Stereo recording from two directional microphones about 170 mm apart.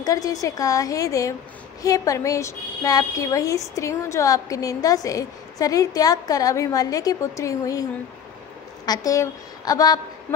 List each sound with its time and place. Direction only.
0.0 s a woman's voice: 20° left (ahead or behind)
8.8 s a woman's voice: 20° left (ahead or behind)